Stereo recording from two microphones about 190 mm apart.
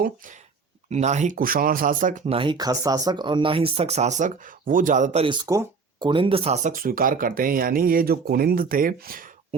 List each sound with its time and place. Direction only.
0.9 s speech: 35° right (ahead or behind)
5.2 s speech: 25° right (ahead or behind); by 9.2 s 50° right (ahead or behind)